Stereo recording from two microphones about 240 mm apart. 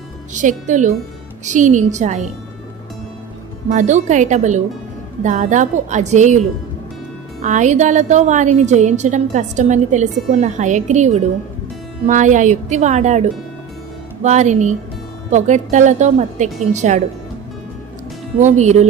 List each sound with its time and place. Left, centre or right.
0.3 s a woman's voice: right
3.7 s a woman's voice: right
7.4 s a woman's voice: right
18.3 s a woman's voice: right